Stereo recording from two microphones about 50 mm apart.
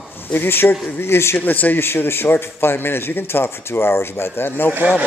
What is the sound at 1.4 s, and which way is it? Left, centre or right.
A man's voice, left.